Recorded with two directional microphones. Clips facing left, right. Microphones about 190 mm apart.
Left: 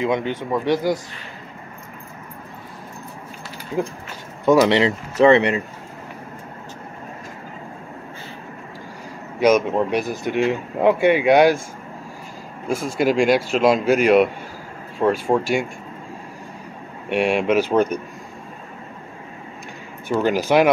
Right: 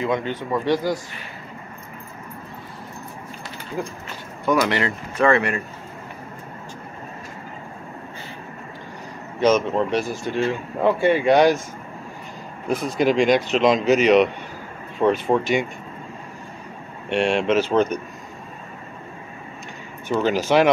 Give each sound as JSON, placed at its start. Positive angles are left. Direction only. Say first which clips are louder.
{"t": 0.0, "sound": "a man's voice", "louder": "left 2 dB", "side_deg": 15}
{"t": 4.5, "sound": "speech", "louder": "left 6 dB", "side_deg": 25}
{"t": 9.4, "sound": "a man's voice", "louder": "left 2 dB", "side_deg": 10}
{"t": 12.6, "sound": "a man's voice", "louder": "even", "side_deg": 10}
{"t": 17.1, "sound": "a man's voice", "louder": "left 1 dB", "side_deg": 10}
{"t": 20.1, "sound": "a man's voice", "louder": "left 1 dB", "side_deg": 10}